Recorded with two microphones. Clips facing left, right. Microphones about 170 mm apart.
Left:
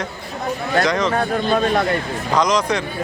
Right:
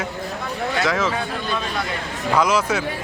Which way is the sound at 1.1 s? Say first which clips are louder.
Left 7 dB; 45° left (ahead or behind).